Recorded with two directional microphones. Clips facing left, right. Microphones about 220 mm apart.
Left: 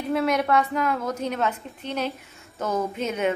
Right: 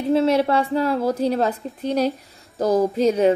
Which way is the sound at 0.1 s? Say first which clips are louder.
Right 5 dB; 30° right (ahead or behind).